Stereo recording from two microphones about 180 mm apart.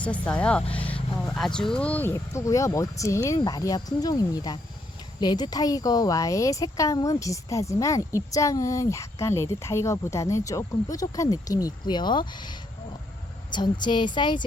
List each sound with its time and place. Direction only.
0.0 s speech: 5° left (ahead or behind)
0.9 s vehicle: 20° left (ahead or behind)
1.3 s a woman's voice: 5° left (ahead or behind); by 14.4 s 25° left (ahead or behind)